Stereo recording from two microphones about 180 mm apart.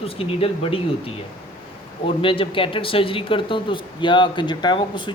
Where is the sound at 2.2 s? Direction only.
30° left (ahead or behind).